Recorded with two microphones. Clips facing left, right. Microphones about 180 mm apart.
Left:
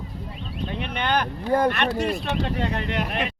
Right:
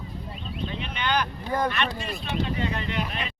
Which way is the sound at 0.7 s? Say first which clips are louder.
Left 3 dB; 55° left (ahead or behind).